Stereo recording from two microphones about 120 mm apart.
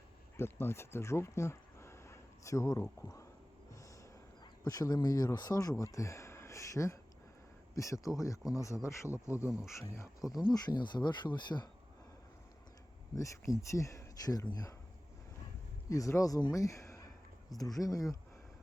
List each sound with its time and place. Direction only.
0.3 s speech: 20° left (ahead or behind)
4.6 s speech: 30° left (ahead or behind)
13.1 s speech: 25° left (ahead or behind)
15.9 s speech: 25° left (ahead or behind)